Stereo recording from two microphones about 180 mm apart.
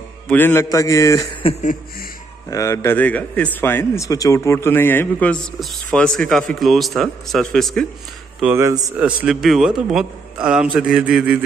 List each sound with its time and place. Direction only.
0.3 s a man's voice: 10° left (ahead or behind)
2.5 s a man's voice: 15° left (ahead or behind); by 11.3 s 5° right (ahead or behind)